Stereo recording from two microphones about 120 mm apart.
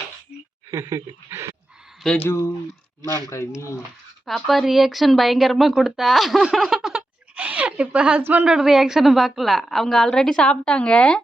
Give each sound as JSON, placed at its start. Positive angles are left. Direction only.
{"t": 0.7, "sound": "speech", "side_deg": -25}
{"t": 2.0, "sound": "speech", "side_deg": 15}
{"t": 3.0, "sound": "speech", "side_deg": 25}
{"t": 4.3, "sound": "speech", "side_deg": 0}
{"t": 8.5, "sound": "a woman's voice", "side_deg": -5}